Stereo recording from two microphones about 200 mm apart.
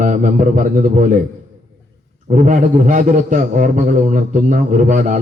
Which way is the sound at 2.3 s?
40° right (ahead or behind).